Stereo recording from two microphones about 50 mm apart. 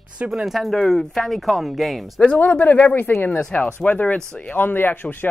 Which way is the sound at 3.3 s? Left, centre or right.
Left.